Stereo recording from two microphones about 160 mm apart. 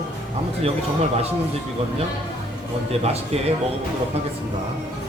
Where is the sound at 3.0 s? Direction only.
40° right (ahead or behind).